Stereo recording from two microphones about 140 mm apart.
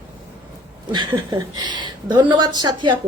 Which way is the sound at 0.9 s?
30° right (ahead or behind).